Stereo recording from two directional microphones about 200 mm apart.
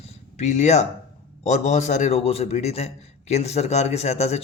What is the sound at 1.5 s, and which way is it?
A man's voice, 35° left (ahead or behind).